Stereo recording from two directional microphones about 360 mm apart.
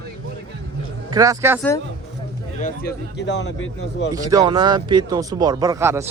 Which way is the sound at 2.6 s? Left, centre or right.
Left.